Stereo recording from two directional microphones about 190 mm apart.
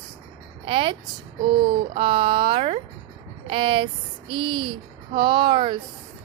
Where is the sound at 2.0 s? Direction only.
25° right (ahead or behind).